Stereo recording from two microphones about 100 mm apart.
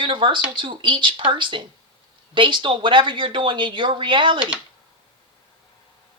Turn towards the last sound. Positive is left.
turn(degrees=-55)  # may be behind; listen again after turning